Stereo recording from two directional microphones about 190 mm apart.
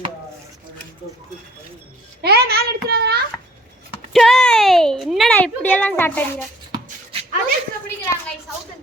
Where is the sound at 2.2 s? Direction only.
55° right (ahead or behind).